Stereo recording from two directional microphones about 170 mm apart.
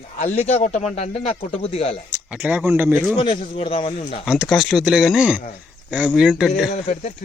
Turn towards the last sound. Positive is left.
turn(degrees=40)  # may be behind; listen again after turning